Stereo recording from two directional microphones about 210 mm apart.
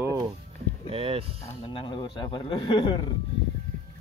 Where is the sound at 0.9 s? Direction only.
25° right (ahead or behind).